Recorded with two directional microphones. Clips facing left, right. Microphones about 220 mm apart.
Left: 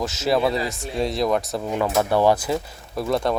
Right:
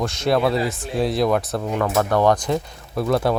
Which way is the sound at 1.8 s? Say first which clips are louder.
Even; 10° left (ahead or behind).